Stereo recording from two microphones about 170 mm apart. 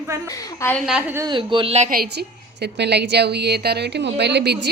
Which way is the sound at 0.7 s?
Centre (ahead or behind).